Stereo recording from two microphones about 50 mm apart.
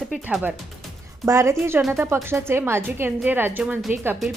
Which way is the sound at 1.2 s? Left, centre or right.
Right.